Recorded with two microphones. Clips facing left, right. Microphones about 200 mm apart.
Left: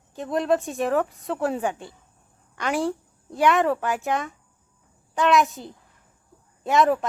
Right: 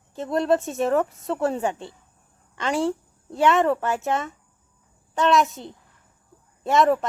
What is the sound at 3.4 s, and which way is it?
Speech, centre (ahead or behind).